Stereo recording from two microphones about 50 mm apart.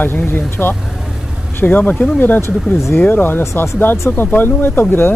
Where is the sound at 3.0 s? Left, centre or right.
Left.